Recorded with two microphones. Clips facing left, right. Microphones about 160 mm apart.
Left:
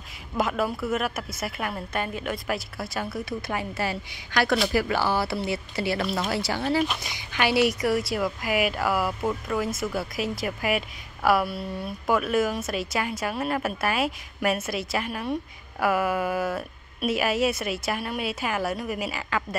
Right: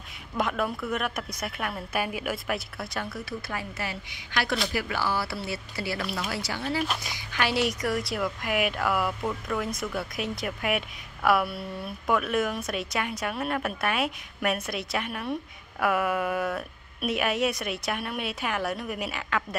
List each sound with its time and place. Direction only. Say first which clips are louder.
0.4 s a woman's voice: left 2 dB; 5° left (ahead or behind); by 3.6 s 20° left (ahead or behind)
3.7 s a woman's voice: left 6 dB; 35° left (ahead or behind)
7.3 s a woman's voice: left 4 dB; 10° left (ahead or behind)